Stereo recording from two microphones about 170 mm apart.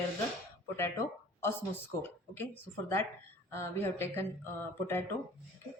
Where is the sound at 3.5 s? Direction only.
15° left (ahead or behind).